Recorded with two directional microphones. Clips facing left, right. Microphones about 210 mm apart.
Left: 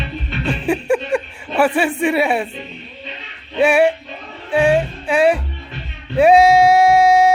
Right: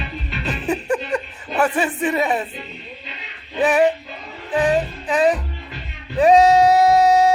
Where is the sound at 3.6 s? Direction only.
10° left (ahead or behind).